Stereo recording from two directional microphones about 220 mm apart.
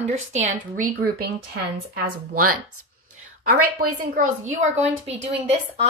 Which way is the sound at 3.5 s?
40° right (ahead or behind).